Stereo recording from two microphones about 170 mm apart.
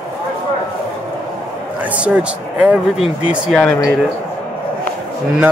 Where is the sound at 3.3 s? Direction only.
5° left (ahead or behind).